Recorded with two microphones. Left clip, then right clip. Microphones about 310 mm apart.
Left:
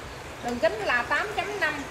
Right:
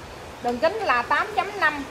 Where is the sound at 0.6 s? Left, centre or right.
Right.